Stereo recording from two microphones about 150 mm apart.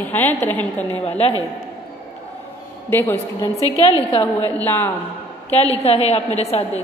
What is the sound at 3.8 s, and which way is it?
Speech, 35° left (ahead or behind).